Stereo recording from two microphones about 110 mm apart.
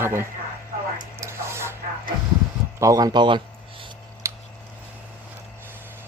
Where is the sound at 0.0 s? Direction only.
20° right (ahead or behind).